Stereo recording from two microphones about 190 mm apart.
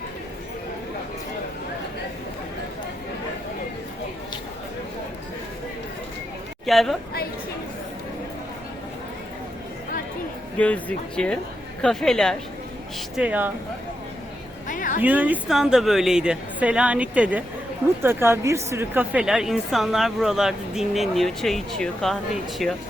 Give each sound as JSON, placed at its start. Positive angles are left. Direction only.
{"t": 6.7, "sound": "a woman's voice", "side_deg": 0}
{"t": 10.6, "sound": "a woman's voice", "side_deg": 5}
{"t": 13.1, "sound": "speech", "side_deg": -10}
{"t": 14.7, "sound": "a sound", "side_deg": 40}
{"t": 15.0, "sound": "a woman's voice", "side_deg": -10}